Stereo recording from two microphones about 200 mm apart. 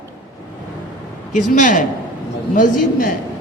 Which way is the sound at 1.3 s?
40° left (ahead or behind).